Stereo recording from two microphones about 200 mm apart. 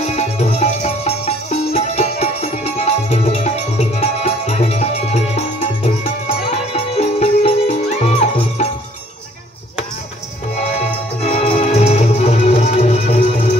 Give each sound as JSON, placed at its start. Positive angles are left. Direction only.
{"t": 0.0, "sound": "music", "side_deg": 35}
{"t": 11.2, "sound": "music", "side_deg": 30}